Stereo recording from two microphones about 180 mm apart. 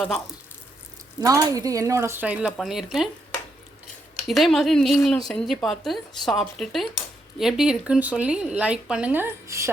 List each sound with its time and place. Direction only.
1.2 s speech: 20° right (ahead or behind); by 3.1 s centre (ahead or behind)
4.3 s a woman's voice: centre (ahead or behind); by 9.7 s 15° right (ahead or behind)